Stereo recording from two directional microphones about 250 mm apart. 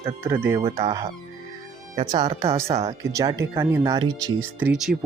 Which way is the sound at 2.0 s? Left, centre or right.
Centre.